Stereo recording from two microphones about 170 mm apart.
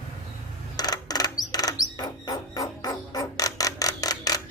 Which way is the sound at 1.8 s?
20° left (ahead or behind).